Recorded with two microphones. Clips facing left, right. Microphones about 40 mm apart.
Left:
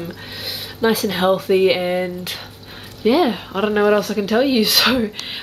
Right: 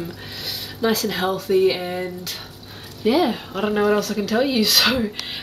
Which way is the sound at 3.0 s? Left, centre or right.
Centre.